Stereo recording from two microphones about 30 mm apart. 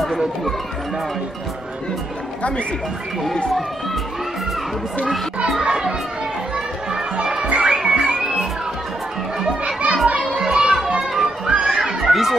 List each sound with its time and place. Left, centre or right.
5.6 s a child's voice: right
6.5 s children playing: right
7.6 s music: right
10.0 s children playing: right
11.0 s children playing: centre
11.5 s children playing: right
12.0 s chatter: centre